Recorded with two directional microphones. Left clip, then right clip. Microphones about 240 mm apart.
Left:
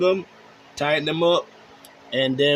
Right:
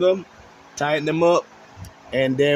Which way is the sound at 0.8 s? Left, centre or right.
Right.